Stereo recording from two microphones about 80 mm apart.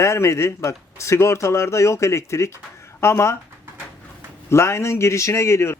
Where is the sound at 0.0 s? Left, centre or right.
Left.